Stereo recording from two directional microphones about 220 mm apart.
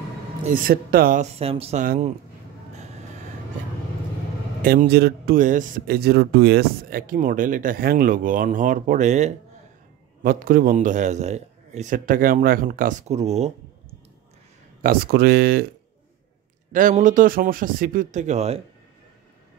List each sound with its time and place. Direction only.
0.5 s speech: 40° right (ahead or behind)
4.6 s speech: 40° right (ahead or behind)
14.8 s speech: 40° right (ahead or behind)
16.7 s speech: 35° right (ahead or behind)